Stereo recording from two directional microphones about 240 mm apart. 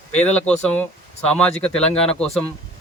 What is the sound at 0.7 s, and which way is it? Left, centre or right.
Speech, centre.